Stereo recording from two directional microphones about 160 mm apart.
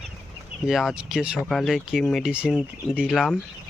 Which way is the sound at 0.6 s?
Centre (ahead or behind).